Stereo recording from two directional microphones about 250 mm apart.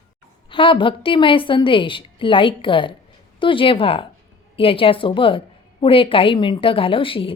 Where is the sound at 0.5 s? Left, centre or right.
Left.